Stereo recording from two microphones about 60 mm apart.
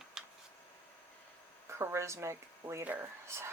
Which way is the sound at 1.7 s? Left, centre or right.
Right.